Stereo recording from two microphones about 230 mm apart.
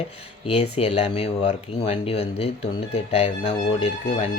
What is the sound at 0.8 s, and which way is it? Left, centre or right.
Speech, left.